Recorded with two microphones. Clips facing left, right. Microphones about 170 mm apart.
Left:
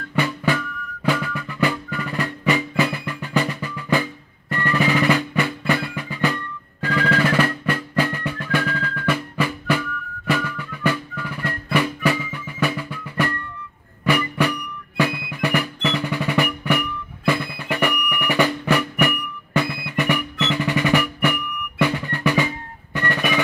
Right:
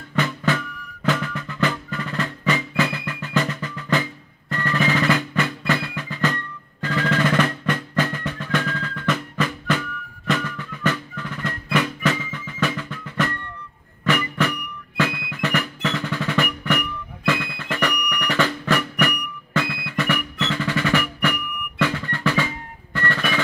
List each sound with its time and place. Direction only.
0.1 s drum: 10° left (ahead or behind)
1.0 s music: 10° left (ahead or behind)
15.0 s music: centre (ahead or behind)
15.4 s music: 10° left (ahead or behind)
22.9 s drum: 15° left (ahead or behind)